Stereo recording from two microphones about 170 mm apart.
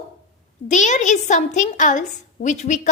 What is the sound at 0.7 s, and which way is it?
A child's voice, 45° left (ahead or behind).